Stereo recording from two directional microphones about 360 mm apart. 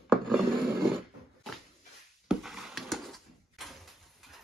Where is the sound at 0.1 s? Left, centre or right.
Centre.